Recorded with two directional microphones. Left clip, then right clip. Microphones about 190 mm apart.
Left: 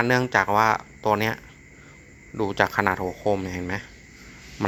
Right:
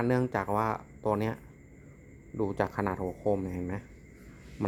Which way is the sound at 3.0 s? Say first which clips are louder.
Left 6 dB; 15° left (ahead or behind).